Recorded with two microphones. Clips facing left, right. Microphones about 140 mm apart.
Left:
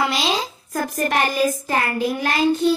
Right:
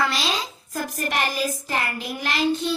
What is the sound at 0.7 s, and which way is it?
Child singing, 50° left (ahead or behind).